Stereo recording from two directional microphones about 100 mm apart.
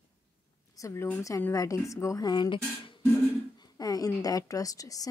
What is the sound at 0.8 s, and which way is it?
Speech, 35° left (ahead or behind).